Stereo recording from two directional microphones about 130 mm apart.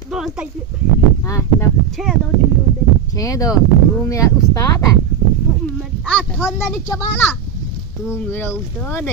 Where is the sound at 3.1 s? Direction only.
25° left (ahead or behind).